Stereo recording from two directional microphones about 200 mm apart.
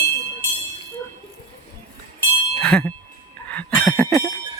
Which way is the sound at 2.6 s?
5° left (ahead or behind).